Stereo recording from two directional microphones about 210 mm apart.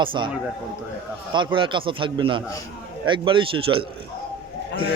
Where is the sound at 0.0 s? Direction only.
25° right (ahead or behind).